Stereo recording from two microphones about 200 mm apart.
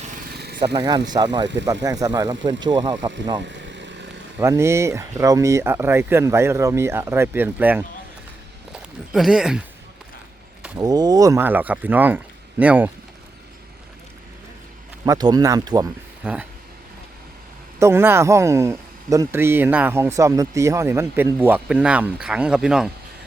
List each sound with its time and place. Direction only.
0.3 s a sound: 55° right (ahead or behind)
0.6 s speech: 25° right (ahead or behind)
3.4 s vehicle: 60° right (ahead or behind)
4.4 s speech: 15° right (ahead or behind)
10.8 s speech: 20° right (ahead or behind)
15.0 s speech: 20° right (ahead or behind)
16.2 s speech: 5° right (ahead or behind)
17.7 s speech: 10° right (ahead or behind)